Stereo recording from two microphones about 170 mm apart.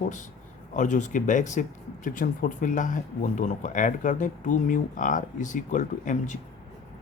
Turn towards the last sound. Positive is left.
turn(degrees=45)  # may be behind; listen again after turning